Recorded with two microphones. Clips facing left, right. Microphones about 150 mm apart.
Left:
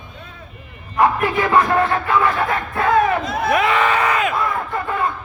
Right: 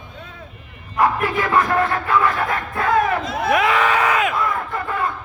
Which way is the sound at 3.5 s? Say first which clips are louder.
Even; centre (ahead or behind).